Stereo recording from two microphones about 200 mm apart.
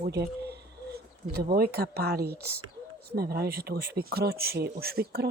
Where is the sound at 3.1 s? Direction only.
50° right (ahead or behind).